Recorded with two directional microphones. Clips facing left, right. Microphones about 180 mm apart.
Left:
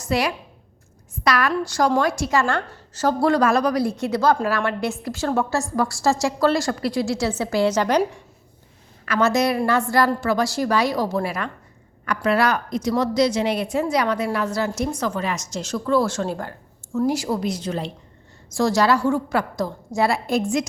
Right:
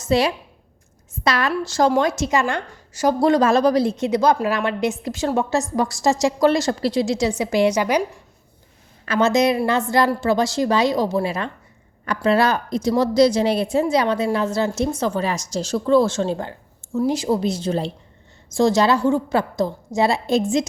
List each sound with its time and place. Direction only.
0.0 s a woman's voice: 25° right (ahead or behind)
9.0 s a woman's voice: 25° right (ahead or behind)